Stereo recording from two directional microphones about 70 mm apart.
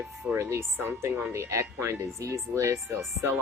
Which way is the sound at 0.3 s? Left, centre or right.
Right.